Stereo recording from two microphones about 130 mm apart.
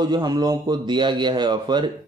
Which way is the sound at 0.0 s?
30° right (ahead or behind).